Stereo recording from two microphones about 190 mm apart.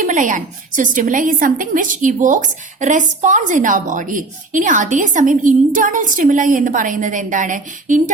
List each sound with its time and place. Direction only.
0.0 s a woman's voice: 40° right (ahead or behind)